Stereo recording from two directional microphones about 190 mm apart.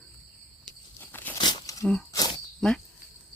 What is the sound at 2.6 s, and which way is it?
Speech, centre (ahead or behind).